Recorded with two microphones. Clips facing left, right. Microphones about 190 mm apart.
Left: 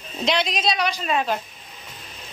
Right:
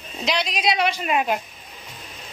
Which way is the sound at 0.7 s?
25° right (ahead or behind).